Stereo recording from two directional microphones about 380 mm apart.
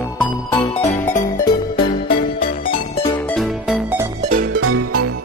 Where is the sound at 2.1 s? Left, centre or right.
Left.